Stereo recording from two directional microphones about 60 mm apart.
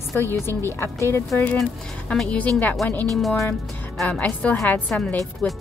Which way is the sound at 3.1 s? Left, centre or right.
Centre.